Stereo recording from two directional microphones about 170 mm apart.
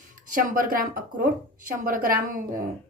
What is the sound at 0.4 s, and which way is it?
Speech, 55° right (ahead or behind).